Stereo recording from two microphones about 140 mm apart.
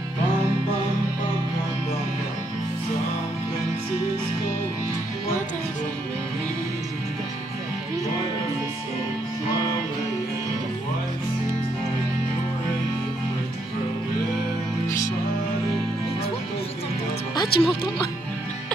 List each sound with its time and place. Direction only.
17.5 s speech: 90° left